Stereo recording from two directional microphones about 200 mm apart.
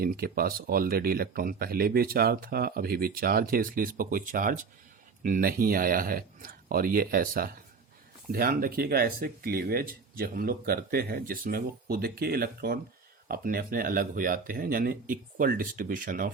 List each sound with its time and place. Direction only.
0.0 s speech: 50° right (ahead or behind)